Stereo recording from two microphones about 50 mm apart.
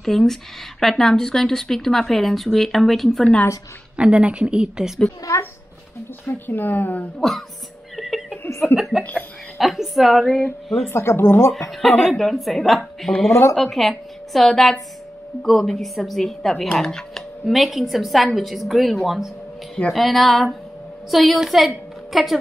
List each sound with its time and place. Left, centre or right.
0.0 s speech: centre
3.9 s speech: right
6.2 s speech: left
7.2 s speech: centre
7.9 s a sound: centre
8.5 s speech: left
9.6 s speech: centre
10.9 s speech: left
11.8 s speech: centre
13.3 s speech: left
13.6 s speech: centre
17.5 s a woman's voice: centre